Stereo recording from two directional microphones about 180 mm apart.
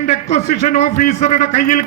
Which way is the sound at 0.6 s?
50° left (ahead or behind).